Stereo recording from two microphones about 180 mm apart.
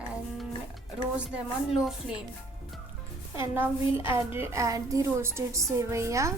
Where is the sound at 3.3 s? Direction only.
15° right (ahead or behind).